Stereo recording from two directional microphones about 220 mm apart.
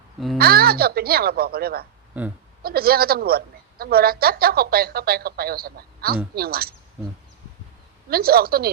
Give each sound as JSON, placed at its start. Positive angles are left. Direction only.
{"t": 0.3, "sound": "a woman's voice", "side_deg": -45}
{"t": 2.2, "sound": "speech", "side_deg": -10}
{"t": 2.6, "sound": "a woman's voice", "side_deg": -45}
{"t": 8.1, "sound": "a woman's voice", "side_deg": -45}